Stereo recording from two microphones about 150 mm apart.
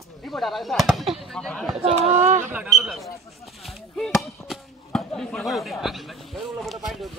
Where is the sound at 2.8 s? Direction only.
Centre (ahead or behind).